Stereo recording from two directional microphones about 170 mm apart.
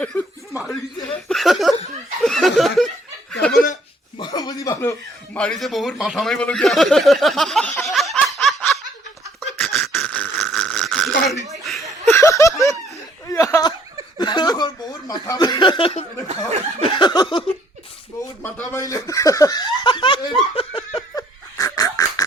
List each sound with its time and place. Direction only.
0.0 s speech: 5° left (ahead or behind)
3.5 s chuckle: 55° left (ahead or behind)
4.2 s chuckle: 25° left (ahead or behind); by 8.8 s centre (ahead or behind)
9.6 s a sound: 5° left (ahead or behind)
11.6 s chuckle: centre (ahead or behind)
12.1 s a sound: 20° left (ahead or behind)
18.2 s a sound: 10° left (ahead or behind)
18.7 s snicker: 20° left (ahead or behind)
21.6 s pig: 20° left (ahead or behind)